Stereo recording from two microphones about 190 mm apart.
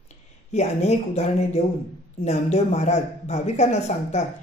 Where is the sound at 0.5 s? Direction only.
35° left (ahead or behind).